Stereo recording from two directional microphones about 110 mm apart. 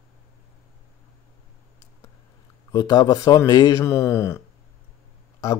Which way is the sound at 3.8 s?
25° left (ahead or behind).